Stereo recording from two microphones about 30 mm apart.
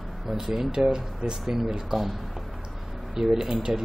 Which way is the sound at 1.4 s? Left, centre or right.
Centre.